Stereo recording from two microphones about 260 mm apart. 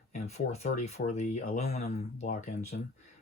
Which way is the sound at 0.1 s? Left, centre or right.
Left.